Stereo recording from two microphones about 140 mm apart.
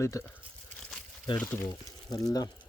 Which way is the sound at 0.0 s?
20° left (ahead or behind).